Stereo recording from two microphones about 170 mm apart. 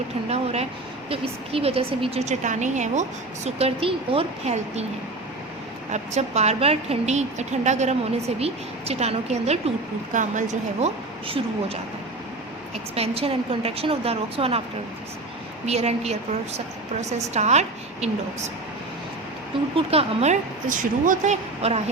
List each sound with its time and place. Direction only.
0.3 s a woman's voice: 40° right (ahead or behind)
5.9 s a woman's voice: 40° right (ahead or behind)
13.0 s a woman's voice: 35° right (ahead or behind)
15.6 s a woman's voice: 40° right (ahead or behind)
19.7 s a woman's voice: 35° right (ahead or behind)